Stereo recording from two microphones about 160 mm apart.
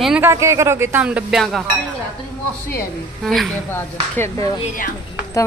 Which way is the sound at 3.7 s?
15° left (ahead or behind).